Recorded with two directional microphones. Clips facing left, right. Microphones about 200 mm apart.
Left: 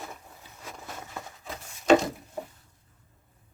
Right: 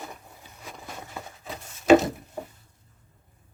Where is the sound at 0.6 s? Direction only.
Centre (ahead or behind).